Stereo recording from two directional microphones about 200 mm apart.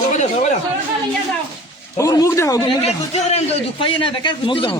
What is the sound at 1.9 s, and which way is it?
Speech, 15° left (ahead or behind).